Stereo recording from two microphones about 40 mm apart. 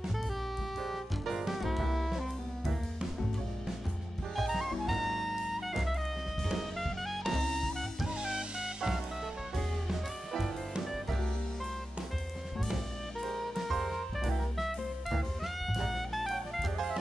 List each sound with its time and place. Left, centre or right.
0.8 s music: centre
4.4 s jazz: centre
6.8 s music: centre
8.2 s music: centre
9.8 s music: centre
13.2 s music: centre